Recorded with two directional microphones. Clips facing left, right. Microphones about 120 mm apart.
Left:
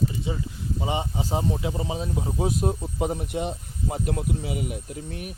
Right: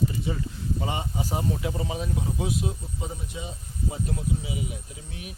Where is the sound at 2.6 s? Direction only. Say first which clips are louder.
Left 7 dB; 60° left (ahead or behind).